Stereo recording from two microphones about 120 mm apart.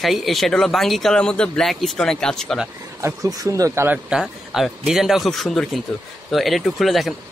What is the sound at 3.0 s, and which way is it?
Speech, 25° right (ahead or behind).